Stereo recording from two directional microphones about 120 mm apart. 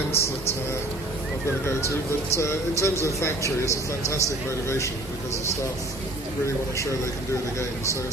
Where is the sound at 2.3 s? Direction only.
25° left (ahead or behind).